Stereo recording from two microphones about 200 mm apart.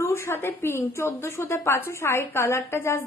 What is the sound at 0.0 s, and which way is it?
A woman's voice, 15° left (ahead or behind).